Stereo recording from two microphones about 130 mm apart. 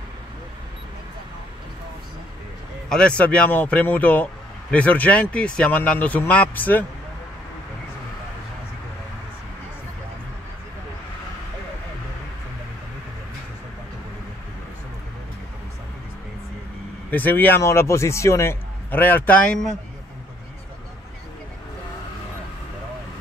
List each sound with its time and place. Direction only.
2.9 s speech: 10° left (ahead or behind)
17.1 s speech: 15° left (ahead or behind)